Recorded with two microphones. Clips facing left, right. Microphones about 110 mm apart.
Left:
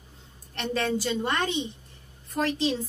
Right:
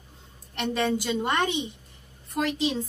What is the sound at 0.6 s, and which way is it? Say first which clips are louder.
A woman's voice: right 1 dB; 15° right (ahead or behind).